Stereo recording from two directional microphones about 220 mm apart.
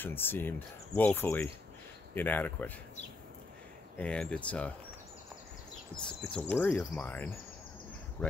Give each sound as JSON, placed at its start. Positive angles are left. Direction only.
{"t": 0.0, "sound": "speech", "side_deg": 10}
{"t": 4.0, "sound": "speech", "side_deg": 5}
{"t": 6.0, "sound": "speech", "side_deg": 5}